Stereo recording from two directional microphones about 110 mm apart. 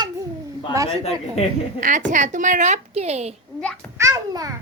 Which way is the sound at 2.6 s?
85° right.